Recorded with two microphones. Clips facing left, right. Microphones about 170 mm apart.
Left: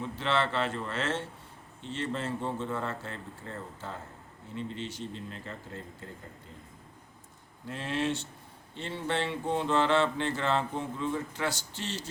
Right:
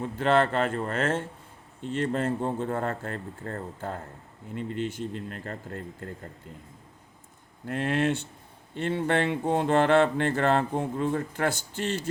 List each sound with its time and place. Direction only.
0.0 s speech: 50° right (ahead or behind)
7.7 s speech: 55° right (ahead or behind)